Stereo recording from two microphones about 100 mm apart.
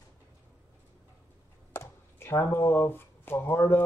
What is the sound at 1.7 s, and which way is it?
Speech, 25° left (ahead or behind).